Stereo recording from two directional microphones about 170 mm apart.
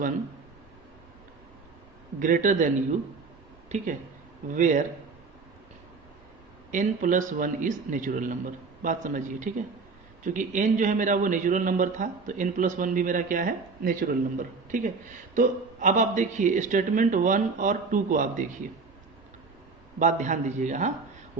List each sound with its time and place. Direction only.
2.1 s a man's voice: 50° right (ahead or behind)
3.7 s a man's voice: 40° right (ahead or behind)
6.7 s a man's voice: 50° right (ahead or behind)
20.0 s a man's voice: 45° right (ahead or behind)